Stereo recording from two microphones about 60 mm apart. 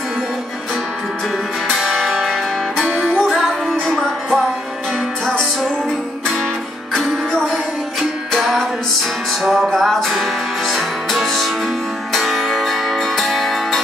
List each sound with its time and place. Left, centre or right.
1.8 s music: centre
6.9 s music: centre
9.4 s music: centre